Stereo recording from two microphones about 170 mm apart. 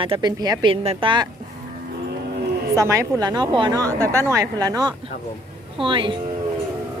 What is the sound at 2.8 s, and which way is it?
Speech, 15° right (ahead or behind).